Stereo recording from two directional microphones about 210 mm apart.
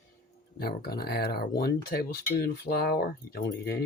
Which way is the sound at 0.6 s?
45° left (ahead or behind).